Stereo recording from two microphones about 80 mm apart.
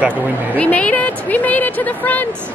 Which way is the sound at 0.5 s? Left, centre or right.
Centre.